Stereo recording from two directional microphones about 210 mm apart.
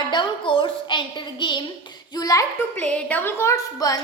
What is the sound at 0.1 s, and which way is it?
A woman's voice, 25° left (ahead or behind).